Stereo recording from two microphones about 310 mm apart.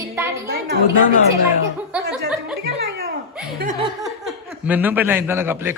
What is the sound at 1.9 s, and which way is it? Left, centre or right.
Speech, centre.